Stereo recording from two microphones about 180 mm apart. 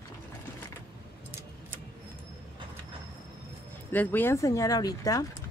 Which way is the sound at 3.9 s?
10° left (ahead or behind).